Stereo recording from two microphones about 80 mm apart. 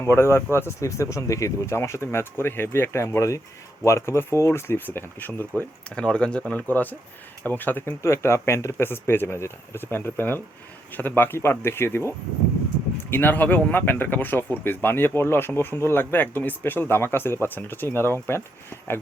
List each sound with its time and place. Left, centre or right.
0.0 s speech: left
5.9 s speech: centre; by 18.4 s left